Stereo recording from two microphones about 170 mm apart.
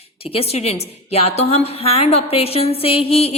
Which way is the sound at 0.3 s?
35° left (ahead or behind).